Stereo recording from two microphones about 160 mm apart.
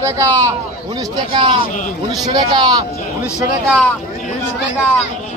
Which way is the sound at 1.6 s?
55° left (ahead or behind).